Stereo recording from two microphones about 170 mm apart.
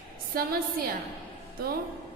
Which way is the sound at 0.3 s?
60° right (ahead or behind).